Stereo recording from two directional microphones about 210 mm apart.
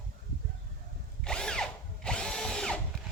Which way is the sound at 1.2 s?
5° left (ahead or behind).